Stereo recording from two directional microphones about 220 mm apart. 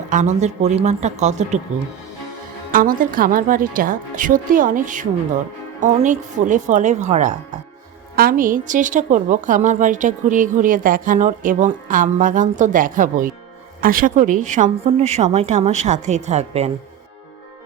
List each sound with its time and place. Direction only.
0.1 s a woman's voice: 35° right (ahead or behind)
2.7 s a woman's voice: 40° right (ahead or behind)